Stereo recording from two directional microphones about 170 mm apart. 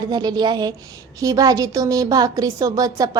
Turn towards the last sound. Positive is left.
turn(degrees=-20)  # may be behind; listen again after turning